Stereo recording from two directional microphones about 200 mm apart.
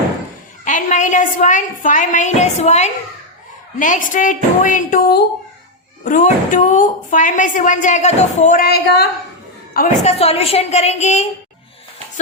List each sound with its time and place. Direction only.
0.6 s a woman's voice: 40° left (ahead or behind)
9.7 s a woman's voice: 40° left (ahead or behind)